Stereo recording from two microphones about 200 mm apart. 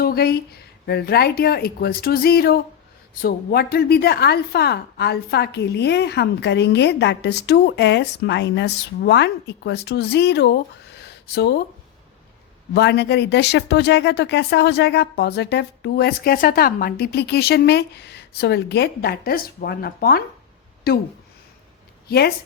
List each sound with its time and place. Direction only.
0.0 s a woman's voice: 50° left (ahead or behind)
12.7 s a woman's voice: 55° left (ahead or behind)
22.0 s speech: 50° left (ahead or behind)